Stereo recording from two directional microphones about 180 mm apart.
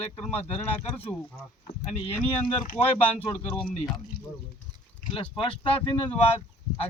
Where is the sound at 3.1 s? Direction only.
35° left (ahead or behind).